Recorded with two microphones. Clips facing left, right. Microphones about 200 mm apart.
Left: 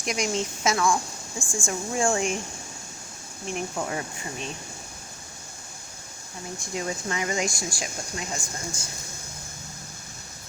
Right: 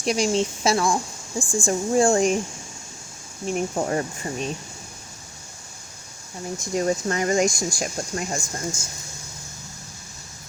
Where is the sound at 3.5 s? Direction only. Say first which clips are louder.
Right 6 dB; 40° right (ahead or behind).